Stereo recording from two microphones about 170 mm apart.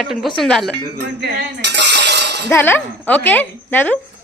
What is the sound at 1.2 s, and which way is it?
Cutlery, 90° right.